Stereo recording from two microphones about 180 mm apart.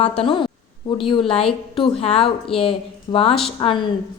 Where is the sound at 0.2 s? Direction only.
30° left (ahead or behind).